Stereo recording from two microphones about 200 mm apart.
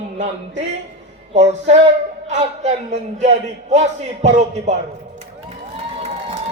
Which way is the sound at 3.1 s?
35° right (ahead or behind).